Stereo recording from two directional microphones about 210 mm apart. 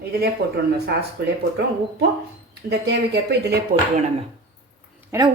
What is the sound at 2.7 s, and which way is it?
Speech, 50° right (ahead or behind).